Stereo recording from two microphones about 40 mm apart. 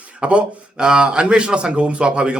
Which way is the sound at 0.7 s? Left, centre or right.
Centre.